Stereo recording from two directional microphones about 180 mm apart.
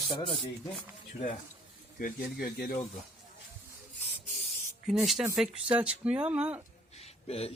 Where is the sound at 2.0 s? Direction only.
50° left (ahead or behind).